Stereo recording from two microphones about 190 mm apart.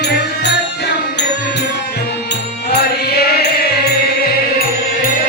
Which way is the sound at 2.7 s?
55° left (ahead or behind).